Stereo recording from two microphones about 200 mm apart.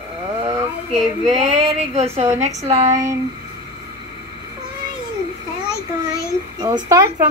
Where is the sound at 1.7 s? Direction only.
35° right (ahead or behind).